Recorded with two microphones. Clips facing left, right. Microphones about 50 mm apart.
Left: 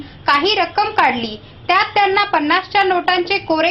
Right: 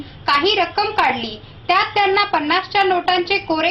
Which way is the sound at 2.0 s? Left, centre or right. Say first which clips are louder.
Left 2 dB; centre.